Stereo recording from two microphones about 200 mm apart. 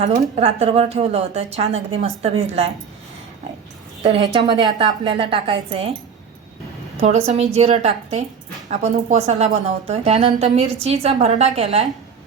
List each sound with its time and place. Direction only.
0.0 s a woman's voice: 30° right (ahead or behind)
4.0 s a woman's voice: 30° right (ahead or behind)
6.9 s a woman's voice: 30° right (ahead or behind)